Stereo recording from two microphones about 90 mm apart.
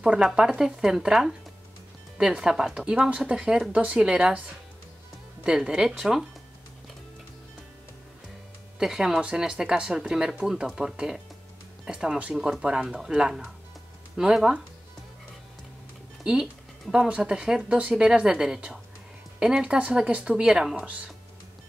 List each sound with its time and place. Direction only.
0.0 s speech: 5° right (ahead or behind)
5.4 s speech: 10° right (ahead or behind)
8.7 s speech: 5° right (ahead or behind)
16.9 s speech: 10° right (ahead or behind)
20.8 s speech: 15° right (ahead or behind)